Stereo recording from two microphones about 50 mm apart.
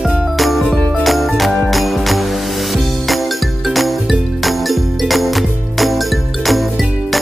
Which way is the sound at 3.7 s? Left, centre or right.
Centre.